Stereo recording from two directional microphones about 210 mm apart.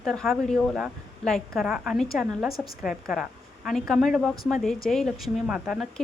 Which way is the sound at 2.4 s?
45° left (ahead or behind).